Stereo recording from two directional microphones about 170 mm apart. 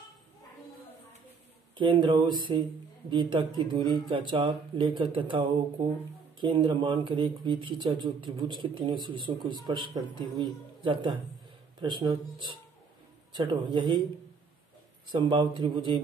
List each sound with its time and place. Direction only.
1.8 s speech: 30° right (ahead or behind)
15.0 s speech: 30° right (ahead or behind)